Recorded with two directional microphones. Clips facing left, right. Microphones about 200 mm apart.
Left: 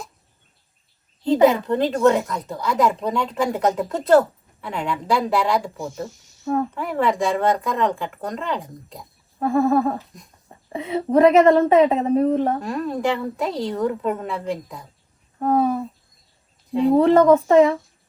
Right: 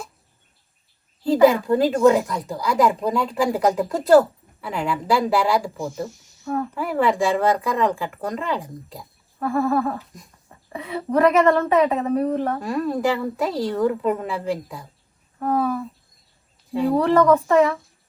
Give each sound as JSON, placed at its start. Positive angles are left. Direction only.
{"t": 1.2, "sound": "speech", "side_deg": -5}
{"t": 6.4, "sound": "speech", "side_deg": 35}
{"t": 6.7, "sound": "speech", "side_deg": 0}
{"t": 9.4, "sound": "a woman's voice", "side_deg": 30}
{"t": 12.5, "sound": "speech", "side_deg": 0}
{"t": 15.4, "sound": "a woman's voice", "side_deg": 30}
{"t": 16.9, "sound": "a woman's voice", "side_deg": 25}